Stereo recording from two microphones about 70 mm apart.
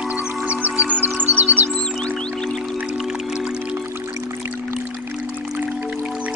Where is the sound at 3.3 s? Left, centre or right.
Centre.